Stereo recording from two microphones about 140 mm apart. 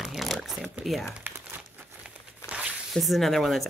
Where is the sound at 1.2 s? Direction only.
15° right (ahead or behind).